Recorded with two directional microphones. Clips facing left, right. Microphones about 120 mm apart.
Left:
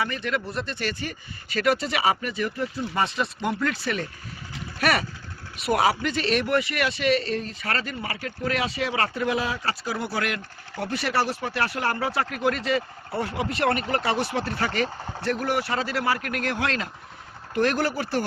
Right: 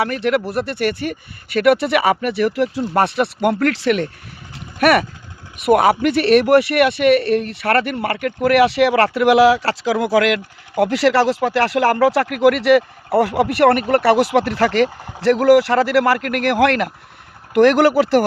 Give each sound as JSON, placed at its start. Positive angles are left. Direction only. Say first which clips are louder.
{"t": 0.0, "sound": "speech", "louder": "right 9 dB", "side_deg": -70}
{"t": 4.8, "sound": "speech", "louder": "right 10 dB", "side_deg": -60}
{"t": 14.3, "sound": "speech", "louder": "right 11 dB", "side_deg": -85}
{"t": 14.8, "sound": "speech", "louder": "right 1 dB", "side_deg": -10}
{"t": 15.2, "sound": "speech", "louder": "right 14 dB", "side_deg": -90}
{"t": 17.5, "sound": "speech", "louder": "right 12 dB", "side_deg": -85}